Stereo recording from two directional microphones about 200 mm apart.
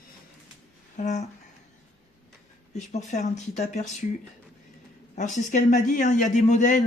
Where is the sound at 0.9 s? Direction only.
35° left (ahead or behind).